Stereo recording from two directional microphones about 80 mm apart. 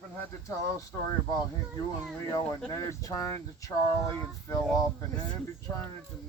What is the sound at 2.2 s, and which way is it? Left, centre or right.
Speech, left.